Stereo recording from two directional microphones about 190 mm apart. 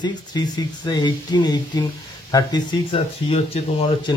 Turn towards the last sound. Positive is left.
turn(degrees=30)  # may be behind; listen again after turning